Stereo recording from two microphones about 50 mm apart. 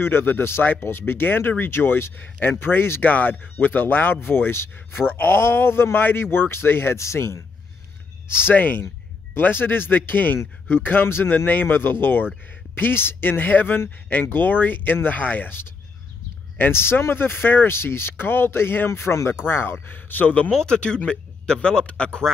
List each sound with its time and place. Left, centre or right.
0.0 s speech: left
4.9 s speech: left
7.0 s speech: left
8.5 s speech: left
16.7 s speech: left
18.9 s speech: left
19.4 s speech: left
20.5 s speech: centre